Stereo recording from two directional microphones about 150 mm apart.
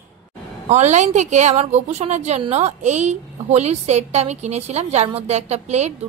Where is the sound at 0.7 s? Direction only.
50° right (ahead or behind).